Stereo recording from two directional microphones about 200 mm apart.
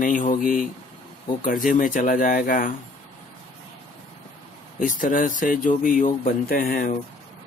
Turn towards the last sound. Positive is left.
turn(degrees=45)  # may be behind; listen again after turning